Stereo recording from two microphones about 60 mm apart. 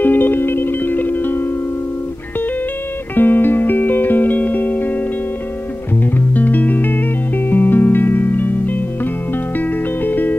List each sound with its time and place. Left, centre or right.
0.0 s music: left
3.2 s music: left
6.1 s music: left